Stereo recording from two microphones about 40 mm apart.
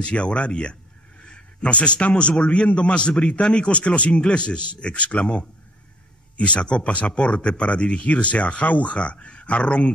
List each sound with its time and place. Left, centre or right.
0.0 s a man's voice: left
6.3 s speech: left